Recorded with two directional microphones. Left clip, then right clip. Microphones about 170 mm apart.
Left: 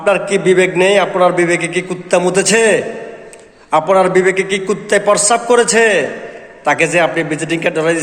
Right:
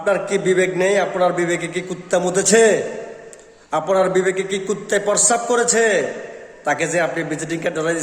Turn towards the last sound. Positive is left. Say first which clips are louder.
# left 7 dB
turn(degrees=-10)  # may be behind; listen again after turning